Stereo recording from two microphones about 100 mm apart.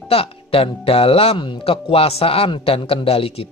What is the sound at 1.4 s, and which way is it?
Speech, 60° left (ahead or behind).